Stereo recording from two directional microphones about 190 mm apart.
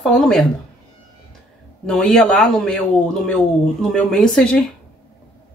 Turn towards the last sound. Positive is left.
turn(degrees=5)  # may be behind; listen again after turning